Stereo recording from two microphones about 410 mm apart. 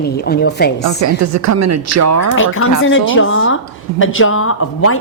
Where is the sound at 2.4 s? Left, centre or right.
Left.